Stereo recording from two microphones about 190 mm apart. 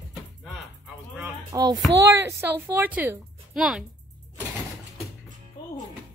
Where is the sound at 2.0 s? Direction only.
15° right (ahead or behind).